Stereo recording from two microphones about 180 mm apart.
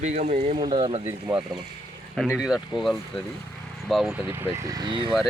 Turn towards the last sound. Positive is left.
turn(degrees=-25)  # may be behind; listen again after turning